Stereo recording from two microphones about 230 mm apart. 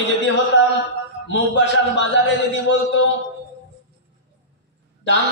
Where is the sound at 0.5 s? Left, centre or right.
Left.